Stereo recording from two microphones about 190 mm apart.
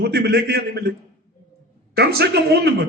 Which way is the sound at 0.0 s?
55° right (ahead or behind).